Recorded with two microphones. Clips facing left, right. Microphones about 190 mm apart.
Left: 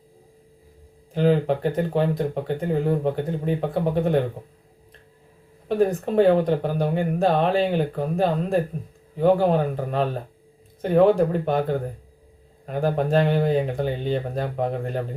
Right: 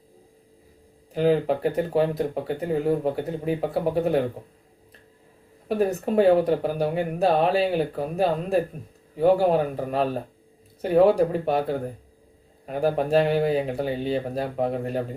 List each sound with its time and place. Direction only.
1.1 s speech: 5° right (ahead or behind)
5.6 s speech: 5° right (ahead or behind)